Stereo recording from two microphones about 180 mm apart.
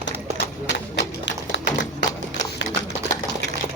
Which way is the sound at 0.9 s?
75° left (ahead or behind).